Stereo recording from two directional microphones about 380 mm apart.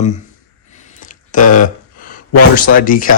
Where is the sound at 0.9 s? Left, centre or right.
Centre.